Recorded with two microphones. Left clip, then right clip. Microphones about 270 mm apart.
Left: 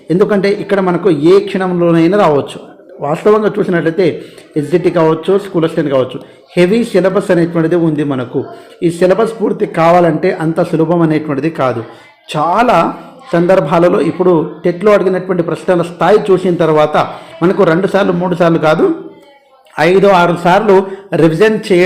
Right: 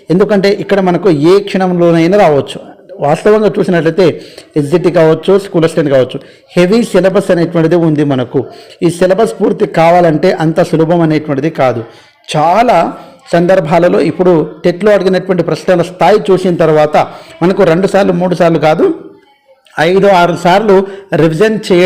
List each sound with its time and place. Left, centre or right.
0.1 s a man's voice: right